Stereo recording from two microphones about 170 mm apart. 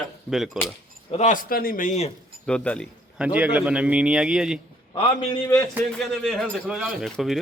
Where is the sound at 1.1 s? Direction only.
50° left (ahead or behind).